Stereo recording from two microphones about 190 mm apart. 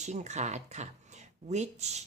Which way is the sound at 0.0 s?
40° right (ahead or behind).